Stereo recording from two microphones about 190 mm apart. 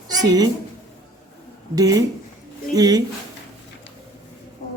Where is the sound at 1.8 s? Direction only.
20° right (ahead or behind).